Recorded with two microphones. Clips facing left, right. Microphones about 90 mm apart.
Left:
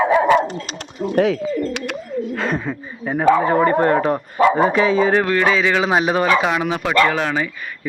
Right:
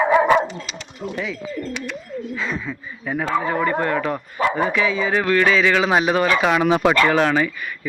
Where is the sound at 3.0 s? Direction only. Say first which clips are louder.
Left 7 dB; 35° left (ahead or behind).